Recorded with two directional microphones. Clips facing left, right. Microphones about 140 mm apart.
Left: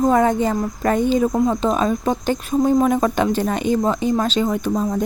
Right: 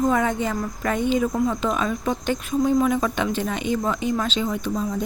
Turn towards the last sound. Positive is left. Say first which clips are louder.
# left 5 dB
turn(degrees=50)  # may be behind; listen again after turning